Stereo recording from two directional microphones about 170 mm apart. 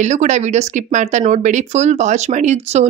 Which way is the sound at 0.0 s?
45° right (ahead or behind).